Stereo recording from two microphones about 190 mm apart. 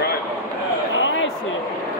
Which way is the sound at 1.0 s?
85° left.